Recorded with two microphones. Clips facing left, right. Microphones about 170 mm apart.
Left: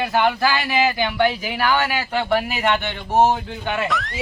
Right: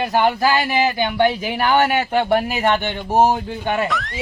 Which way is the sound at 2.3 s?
45° right (ahead or behind).